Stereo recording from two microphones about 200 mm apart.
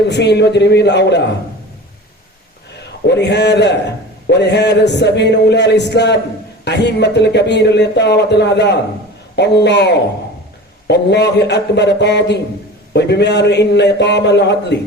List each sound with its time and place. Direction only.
0.1 s a man's voice: 60° left (ahead or behind)
3.1 s a man's voice: 60° left (ahead or behind)